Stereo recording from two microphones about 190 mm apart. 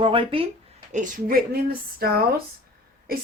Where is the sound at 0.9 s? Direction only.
45° right (ahead or behind).